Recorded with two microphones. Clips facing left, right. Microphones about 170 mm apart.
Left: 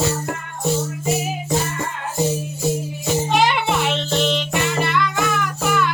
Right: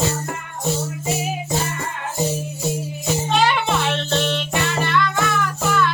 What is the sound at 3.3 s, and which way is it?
Music, 15° left (ahead or behind).